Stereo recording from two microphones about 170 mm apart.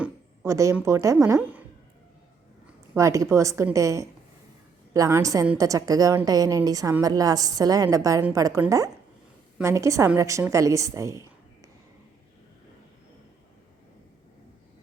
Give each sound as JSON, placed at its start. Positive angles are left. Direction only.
{"t": 0.0, "sound": "speech", "side_deg": -15}
{"t": 2.9, "sound": "a woman's voice", "side_deg": -20}